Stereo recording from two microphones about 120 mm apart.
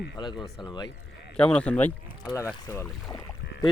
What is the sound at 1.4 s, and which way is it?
Speech, 10° left (ahead or behind).